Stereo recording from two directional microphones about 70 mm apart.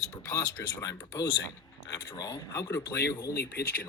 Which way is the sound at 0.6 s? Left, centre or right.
Left.